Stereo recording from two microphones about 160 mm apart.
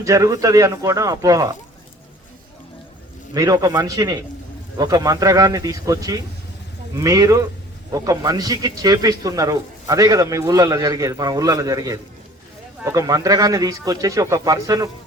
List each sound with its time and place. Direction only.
0.0 s a man's voice: 20° right (ahead or behind)
3.3 s a man's voice: 20° right (ahead or behind)